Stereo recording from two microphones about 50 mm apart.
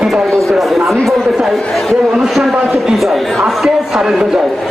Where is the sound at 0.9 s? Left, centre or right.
Centre.